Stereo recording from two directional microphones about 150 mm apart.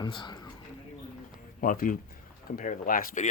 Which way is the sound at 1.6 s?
65° left (ahead or behind).